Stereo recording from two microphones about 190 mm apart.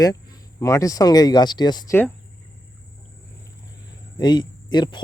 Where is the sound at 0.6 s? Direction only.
15° left (ahead or behind).